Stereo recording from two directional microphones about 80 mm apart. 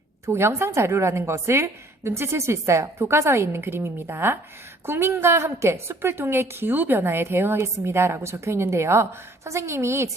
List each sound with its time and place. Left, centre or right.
0.3 s a woman's voice: right